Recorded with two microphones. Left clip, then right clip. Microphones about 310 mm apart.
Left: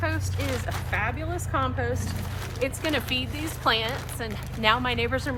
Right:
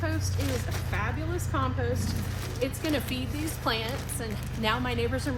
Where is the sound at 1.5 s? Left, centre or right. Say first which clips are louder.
Left 4 dB; centre.